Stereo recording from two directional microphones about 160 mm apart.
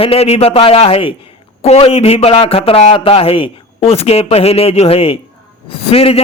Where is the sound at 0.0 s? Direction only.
40° left (ahead or behind).